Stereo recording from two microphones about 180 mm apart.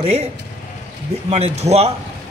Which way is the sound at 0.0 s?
35° right (ahead or behind).